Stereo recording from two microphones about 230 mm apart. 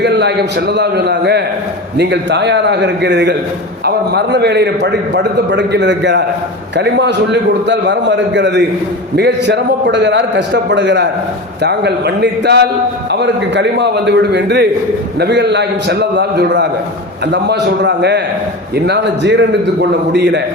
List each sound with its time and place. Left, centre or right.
0.0 s a man's voice: right